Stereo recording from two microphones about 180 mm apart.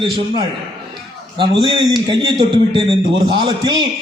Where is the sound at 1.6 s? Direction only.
25° right (ahead or behind).